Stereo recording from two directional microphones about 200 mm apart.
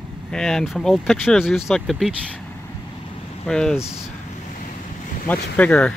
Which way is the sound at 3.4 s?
5° left (ahead or behind).